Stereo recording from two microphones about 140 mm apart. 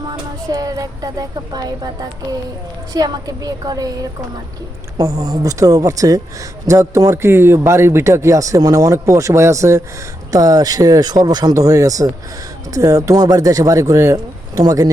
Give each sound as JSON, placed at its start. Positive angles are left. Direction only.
{"t": 0.1, "sound": "speech", "side_deg": -25}
{"t": 4.9, "sound": "speech", "side_deg": -25}